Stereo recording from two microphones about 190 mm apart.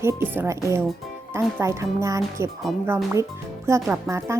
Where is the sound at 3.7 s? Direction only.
15° right (ahead or behind).